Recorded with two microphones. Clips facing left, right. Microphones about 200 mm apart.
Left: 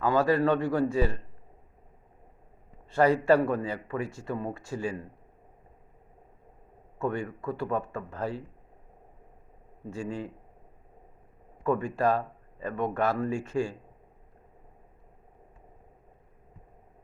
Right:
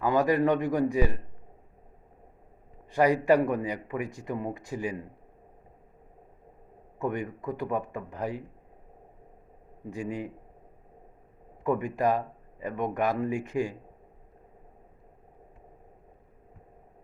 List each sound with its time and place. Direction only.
0.0 s speech: 15° right (ahead or behind)
2.9 s speech: 15° right (ahead or behind)
7.0 s speech: 15° right (ahead or behind)
9.9 s speech: 15° right (ahead or behind)
11.6 s speech: 15° right (ahead or behind)